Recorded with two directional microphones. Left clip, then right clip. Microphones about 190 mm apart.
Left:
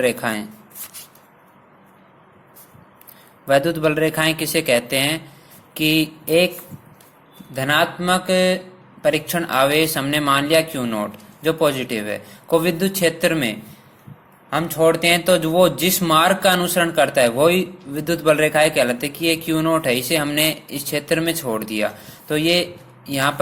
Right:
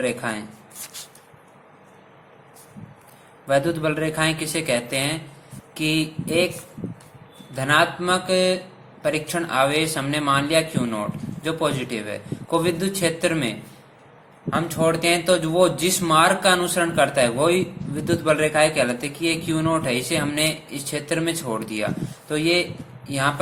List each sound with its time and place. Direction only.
0.0 s speech: 35° left (ahead or behind)
3.4 s speech: 30° left (ahead or behind)
7.5 s speech: 30° left (ahead or behind)